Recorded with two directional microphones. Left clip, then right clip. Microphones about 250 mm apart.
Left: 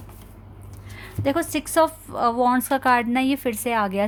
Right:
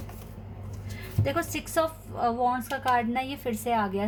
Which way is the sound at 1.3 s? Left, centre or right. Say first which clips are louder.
Left 6 dB; left.